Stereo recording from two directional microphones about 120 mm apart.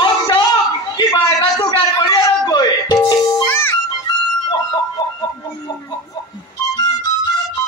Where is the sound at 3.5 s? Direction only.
20° left (ahead or behind).